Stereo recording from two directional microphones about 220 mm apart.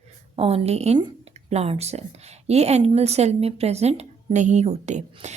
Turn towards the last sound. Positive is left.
turn(degrees=-30)  # may be behind; listen again after turning